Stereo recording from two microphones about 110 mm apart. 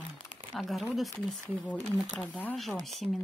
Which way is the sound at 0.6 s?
Centre (ahead or behind).